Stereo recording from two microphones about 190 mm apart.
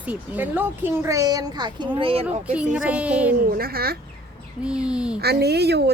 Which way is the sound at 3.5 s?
55° right (ahead or behind).